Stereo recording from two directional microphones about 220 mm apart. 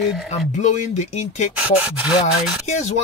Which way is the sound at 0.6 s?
35° left (ahead or behind).